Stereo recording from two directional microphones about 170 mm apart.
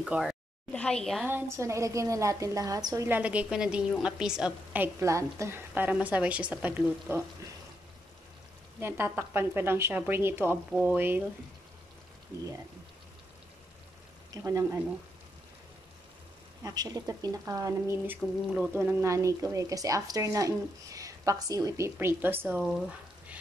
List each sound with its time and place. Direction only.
0.0 s speech: 5° right (ahead or behind)
0.7 s a woman's voice: 5° left (ahead or behind)
1.2 s a woman's voice: 15° right (ahead or behind)
8.7 s a woman's voice: 15° right (ahead or behind)
14.3 s a woman's voice: 20° right (ahead or behind)
16.6 s speech: 20° right (ahead or behind); by 23.4 s 5° right (ahead or behind)